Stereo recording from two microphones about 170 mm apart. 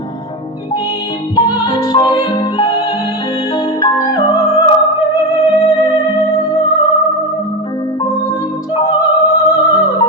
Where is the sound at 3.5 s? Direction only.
25° left (ahead or behind).